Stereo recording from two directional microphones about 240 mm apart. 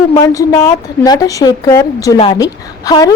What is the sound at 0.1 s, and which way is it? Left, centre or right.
A woman's voice, centre.